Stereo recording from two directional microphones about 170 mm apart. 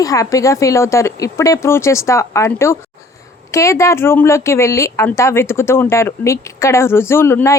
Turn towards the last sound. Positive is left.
turn(degrees=15)  # may be behind; listen again after turning